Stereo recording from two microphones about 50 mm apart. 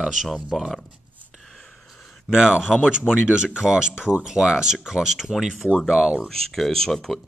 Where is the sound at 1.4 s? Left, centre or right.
Centre.